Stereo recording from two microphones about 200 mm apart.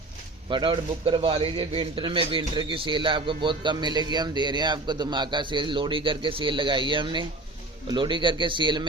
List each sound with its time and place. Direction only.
0.4 s a man's voice: 25° right (ahead or behind)